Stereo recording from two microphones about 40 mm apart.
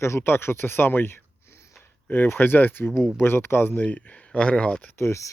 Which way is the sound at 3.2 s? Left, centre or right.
Left.